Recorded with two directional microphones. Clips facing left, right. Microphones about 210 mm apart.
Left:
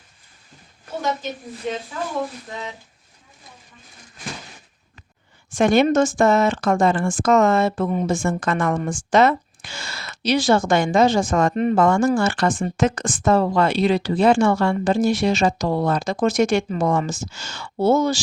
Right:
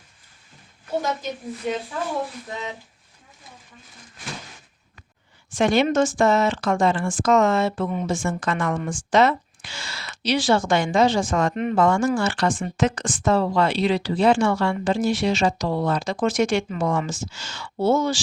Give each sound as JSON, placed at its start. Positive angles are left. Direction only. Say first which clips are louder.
{"t": 5.5, "sound": "speech", "louder": "left 3 dB", "side_deg": 50}